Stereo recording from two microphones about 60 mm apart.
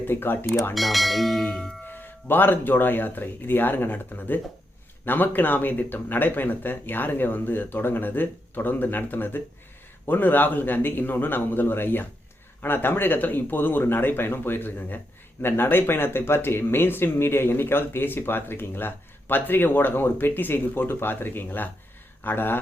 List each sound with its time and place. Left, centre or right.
0.0 s speech: left
0.7 s speech: centre
1.5 s music: centre
1.8 s speech: left